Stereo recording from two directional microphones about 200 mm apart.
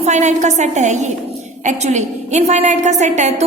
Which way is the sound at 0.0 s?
35° right (ahead or behind).